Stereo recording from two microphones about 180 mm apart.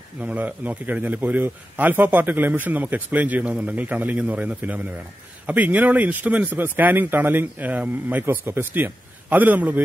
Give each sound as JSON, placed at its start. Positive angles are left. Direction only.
{"t": 0.2, "sound": "a man's voice", "side_deg": -10}